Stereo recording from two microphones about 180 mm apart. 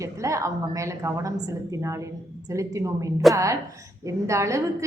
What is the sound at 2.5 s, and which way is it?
A woman's voice, 15° right (ahead or behind).